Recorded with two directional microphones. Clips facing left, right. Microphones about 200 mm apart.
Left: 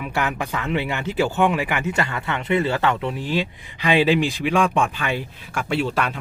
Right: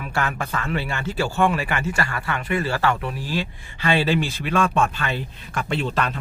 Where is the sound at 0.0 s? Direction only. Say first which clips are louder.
Left 2 dB; 15° left (ahead or behind).